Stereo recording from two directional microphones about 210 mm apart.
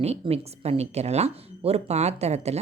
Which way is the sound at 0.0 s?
30° right (ahead or behind).